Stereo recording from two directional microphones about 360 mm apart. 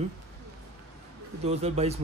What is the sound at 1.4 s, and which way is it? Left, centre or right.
Speech, centre.